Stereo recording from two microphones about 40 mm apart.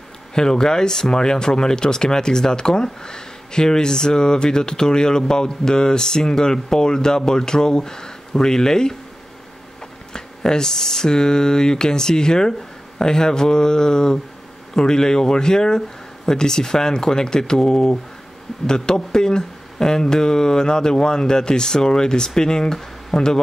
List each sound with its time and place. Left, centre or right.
0.3 s speech: centre
10.1 s speech: centre